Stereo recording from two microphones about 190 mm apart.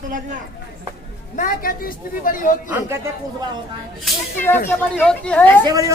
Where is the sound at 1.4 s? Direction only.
45° left (ahead or behind).